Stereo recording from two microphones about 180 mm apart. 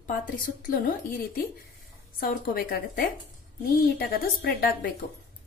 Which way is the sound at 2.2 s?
55° left (ahead or behind).